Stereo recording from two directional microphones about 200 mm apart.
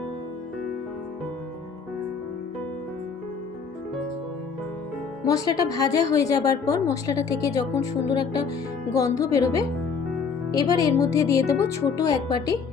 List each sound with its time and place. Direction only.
5.2 s a woman's voice: 20° left (ahead or behind)
8.1 s music: 20° left (ahead or behind)
9.0 s a woman's voice: 15° left (ahead or behind)